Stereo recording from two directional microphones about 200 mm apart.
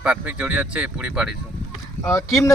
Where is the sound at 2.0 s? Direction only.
15° left (ahead or behind).